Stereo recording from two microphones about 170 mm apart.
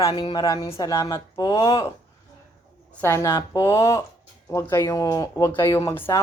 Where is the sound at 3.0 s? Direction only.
15° left (ahead or behind).